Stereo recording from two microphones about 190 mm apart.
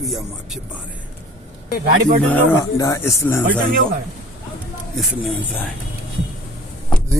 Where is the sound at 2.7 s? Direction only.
15° left (ahead or behind).